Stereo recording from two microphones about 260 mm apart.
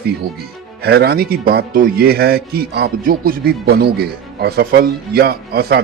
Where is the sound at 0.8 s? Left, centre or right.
Right.